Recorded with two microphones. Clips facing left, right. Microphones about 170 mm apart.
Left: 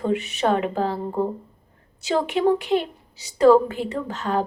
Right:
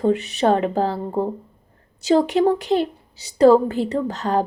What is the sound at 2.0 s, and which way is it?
Speech, 35° right (ahead or behind).